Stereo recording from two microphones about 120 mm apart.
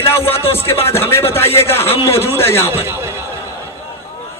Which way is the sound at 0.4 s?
55° left (ahead or behind).